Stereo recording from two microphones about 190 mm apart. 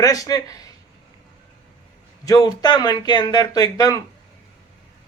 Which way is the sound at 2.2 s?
20° left (ahead or behind).